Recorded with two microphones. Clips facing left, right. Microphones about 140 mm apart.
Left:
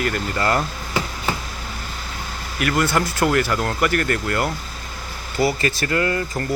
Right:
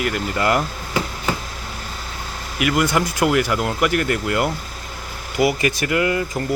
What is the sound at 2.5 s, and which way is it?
Speech, 15° right (ahead or behind).